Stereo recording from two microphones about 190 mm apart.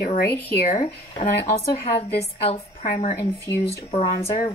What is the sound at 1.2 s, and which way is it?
Speech, 35° left (ahead or behind).